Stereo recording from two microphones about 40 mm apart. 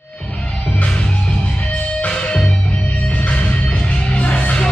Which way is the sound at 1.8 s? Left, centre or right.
Left.